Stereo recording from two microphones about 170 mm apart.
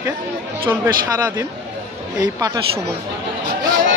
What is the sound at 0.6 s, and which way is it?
Speech, 25° right (ahead or behind).